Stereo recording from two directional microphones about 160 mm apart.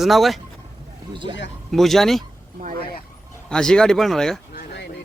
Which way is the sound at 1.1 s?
30° right (ahead or behind).